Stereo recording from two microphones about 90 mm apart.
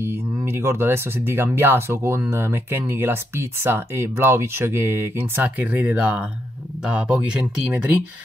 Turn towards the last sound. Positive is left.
turn(degrees=-10)  # may be behind; listen again after turning